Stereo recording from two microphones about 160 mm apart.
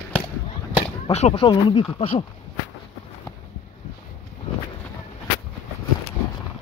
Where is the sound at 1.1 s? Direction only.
40° left (ahead or behind).